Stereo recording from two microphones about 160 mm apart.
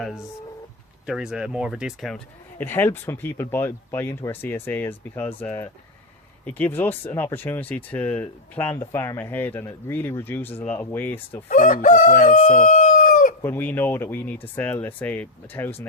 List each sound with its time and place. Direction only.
0.0 s speech: centre (ahead or behind)
2.6 s speech: 15° left (ahead or behind)
11.4 s fowl: 55° left (ahead or behind)
12.5 s chicken: 55° left (ahead or behind)
13.4 s speech: 15° left (ahead or behind)